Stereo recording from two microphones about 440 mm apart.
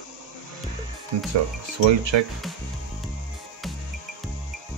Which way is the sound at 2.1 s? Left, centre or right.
Right.